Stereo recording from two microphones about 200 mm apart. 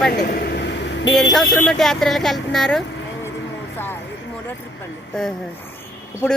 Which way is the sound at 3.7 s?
10° left (ahead or behind).